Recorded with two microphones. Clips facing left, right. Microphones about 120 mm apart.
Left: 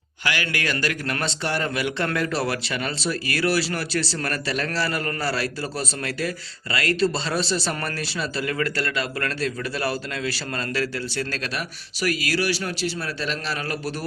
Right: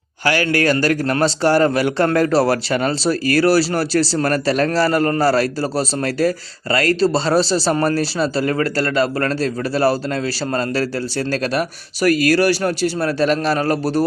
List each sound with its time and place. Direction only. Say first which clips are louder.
0.3 s a man's voice: right 10 dB; 40° right (ahead or behind)